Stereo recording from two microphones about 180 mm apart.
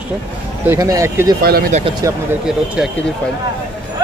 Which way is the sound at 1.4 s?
60° right (ahead or behind).